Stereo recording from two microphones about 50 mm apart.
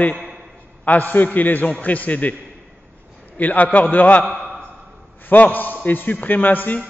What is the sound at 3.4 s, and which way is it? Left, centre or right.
Speech, left.